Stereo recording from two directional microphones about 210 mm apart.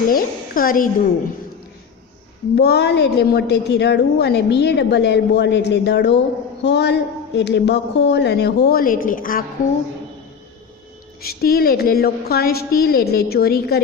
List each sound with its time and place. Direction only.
0.1 s a woman's voice: 45° left (ahead or behind)
2.6 s a woman's voice: 50° left (ahead or behind)
11.2 s a woman's voice: 45° left (ahead or behind)